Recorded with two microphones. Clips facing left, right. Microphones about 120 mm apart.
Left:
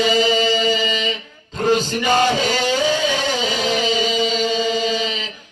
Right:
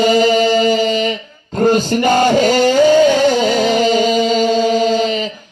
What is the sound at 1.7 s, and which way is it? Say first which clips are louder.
Music: right 4 dB; 50° right (ahead or behind).